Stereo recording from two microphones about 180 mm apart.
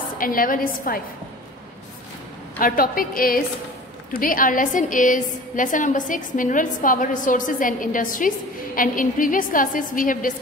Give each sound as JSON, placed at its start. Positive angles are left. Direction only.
{"t": 0.2, "sound": "a woman's voice", "side_deg": 50}
{"t": 2.6, "sound": "a woman's voice", "side_deg": 50}